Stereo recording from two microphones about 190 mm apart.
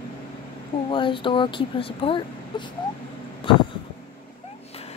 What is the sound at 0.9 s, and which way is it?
Speech, 25° left (ahead or behind).